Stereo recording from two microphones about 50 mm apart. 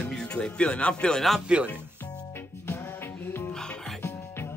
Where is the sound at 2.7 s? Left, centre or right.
Left.